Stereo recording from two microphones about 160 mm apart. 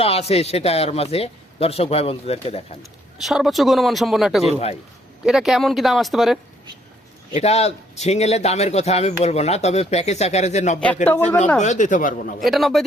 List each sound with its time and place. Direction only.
0.0 s speech: 40° left (ahead or behind)
3.2 s speech: centre (ahead or behind)
4.4 s speech: 40° left (ahead or behind)
5.2 s speech: 5° right (ahead or behind)
7.3 s a man's voice: 40° left (ahead or behind)
12.4 s speech: centre (ahead or behind)